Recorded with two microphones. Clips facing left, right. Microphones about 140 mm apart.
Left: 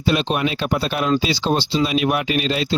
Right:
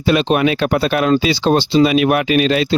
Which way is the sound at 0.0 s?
65° right (ahead or behind).